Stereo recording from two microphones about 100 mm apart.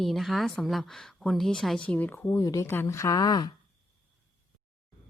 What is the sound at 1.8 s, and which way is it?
Speech, 15° left (ahead or behind).